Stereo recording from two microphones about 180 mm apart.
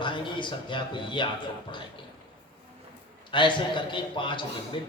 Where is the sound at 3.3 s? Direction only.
25° left (ahead or behind).